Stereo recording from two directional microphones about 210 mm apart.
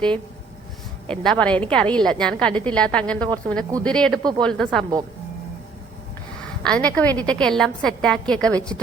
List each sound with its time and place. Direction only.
1.0 s a woman's voice: 5° left (ahead or behind)
6.6 s a woman's voice: 5° left (ahead or behind)